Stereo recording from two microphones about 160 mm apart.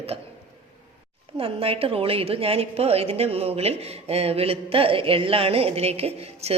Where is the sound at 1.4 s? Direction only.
35° right (ahead or behind).